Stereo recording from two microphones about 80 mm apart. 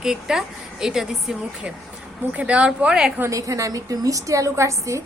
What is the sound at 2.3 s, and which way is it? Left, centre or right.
Speech, centre.